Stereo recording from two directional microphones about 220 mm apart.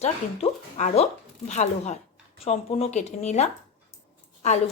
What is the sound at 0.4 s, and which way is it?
Speech, 25° left (ahead or behind).